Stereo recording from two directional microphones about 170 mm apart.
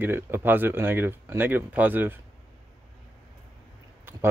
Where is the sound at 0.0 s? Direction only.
15° right (ahead or behind).